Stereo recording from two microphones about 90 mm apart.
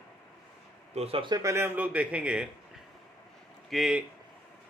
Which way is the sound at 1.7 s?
15° right (ahead or behind).